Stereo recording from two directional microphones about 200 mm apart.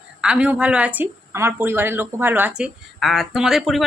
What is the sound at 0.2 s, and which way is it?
A woman's voice, 5° right (ahead or behind).